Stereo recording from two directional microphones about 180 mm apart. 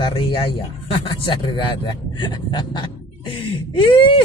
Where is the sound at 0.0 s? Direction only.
30° left (ahead or behind).